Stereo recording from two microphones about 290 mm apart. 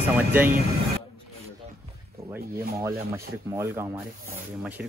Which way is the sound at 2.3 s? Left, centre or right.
Centre.